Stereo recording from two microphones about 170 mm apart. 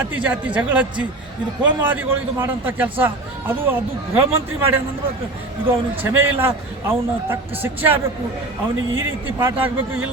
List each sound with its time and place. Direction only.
0.0 s a man's voice: 10° right (ahead or behind)